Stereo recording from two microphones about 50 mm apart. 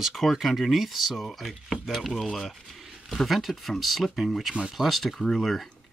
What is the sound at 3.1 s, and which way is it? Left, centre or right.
Speech, centre.